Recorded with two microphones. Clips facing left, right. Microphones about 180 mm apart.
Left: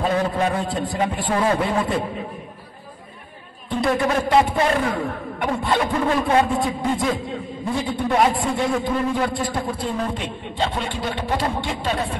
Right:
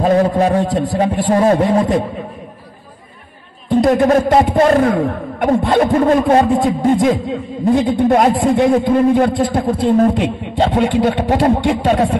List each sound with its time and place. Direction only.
0.0 s a man's voice: 40° right (ahead or behind)
3.8 s a man's voice: 45° right (ahead or behind)
9.9 s a sound: 55° right (ahead or behind)